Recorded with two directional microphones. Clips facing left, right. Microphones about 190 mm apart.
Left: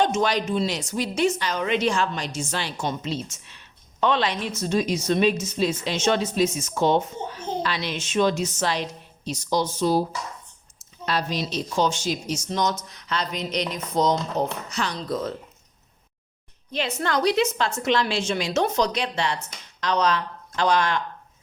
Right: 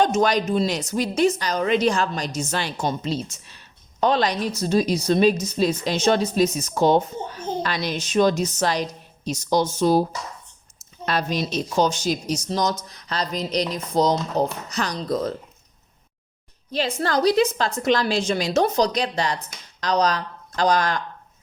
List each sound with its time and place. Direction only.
0.0 s a woman's voice: 45° right (ahead or behind)
16.7 s a woman's voice: 35° right (ahead or behind)